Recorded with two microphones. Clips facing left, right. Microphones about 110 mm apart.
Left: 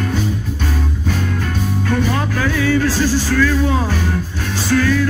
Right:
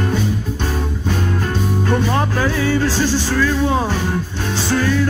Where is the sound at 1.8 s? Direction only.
25° right (ahead or behind).